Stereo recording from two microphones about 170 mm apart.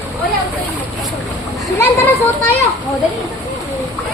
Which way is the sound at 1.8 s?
10° left (ahead or behind).